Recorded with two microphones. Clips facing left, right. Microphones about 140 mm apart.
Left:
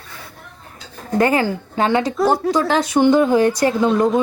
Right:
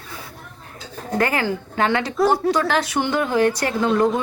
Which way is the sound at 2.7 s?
20° left (ahead or behind).